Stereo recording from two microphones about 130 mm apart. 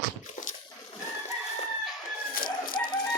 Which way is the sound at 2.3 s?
90° left.